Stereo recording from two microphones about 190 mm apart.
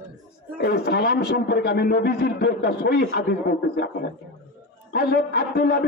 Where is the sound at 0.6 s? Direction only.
60° left (ahead or behind).